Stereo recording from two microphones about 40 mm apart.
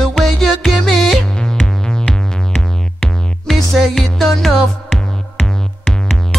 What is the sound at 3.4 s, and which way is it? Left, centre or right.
Music, centre.